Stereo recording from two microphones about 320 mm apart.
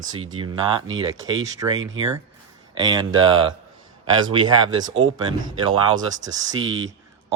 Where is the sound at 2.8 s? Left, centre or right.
Centre.